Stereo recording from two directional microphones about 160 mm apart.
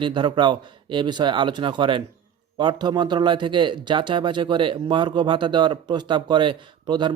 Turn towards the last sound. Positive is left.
turn(degrees=-30)  # may be behind; listen again after turning